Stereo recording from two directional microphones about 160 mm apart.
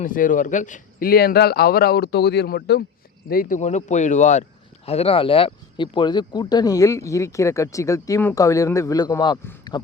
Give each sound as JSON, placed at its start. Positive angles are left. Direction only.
{"t": 0.0, "sound": "speech", "side_deg": 55}
{"t": 3.2, "sound": "speech", "side_deg": 65}
{"t": 3.6, "sound": "speech", "side_deg": 45}
{"t": 4.9, "sound": "speech", "side_deg": 40}